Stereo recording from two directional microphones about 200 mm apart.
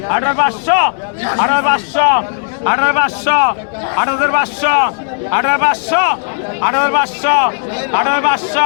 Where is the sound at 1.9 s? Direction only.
45° left (ahead or behind).